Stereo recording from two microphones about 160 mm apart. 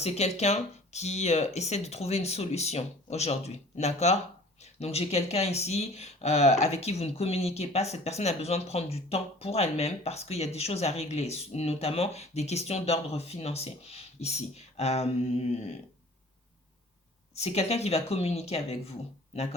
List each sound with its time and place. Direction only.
0.0 s speech: 45° left (ahead or behind)
17.3 s speech: 40° left (ahead or behind)